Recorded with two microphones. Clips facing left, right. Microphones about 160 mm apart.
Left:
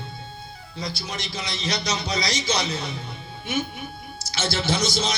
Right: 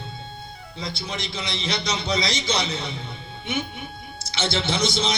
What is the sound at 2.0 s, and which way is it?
Speech, 25° right (ahead or behind).